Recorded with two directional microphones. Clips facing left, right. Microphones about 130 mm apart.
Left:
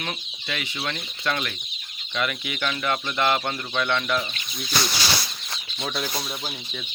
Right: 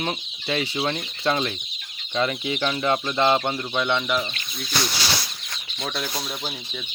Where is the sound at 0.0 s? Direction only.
30° right (ahead or behind); by 4.3 s 10° right (ahead or behind).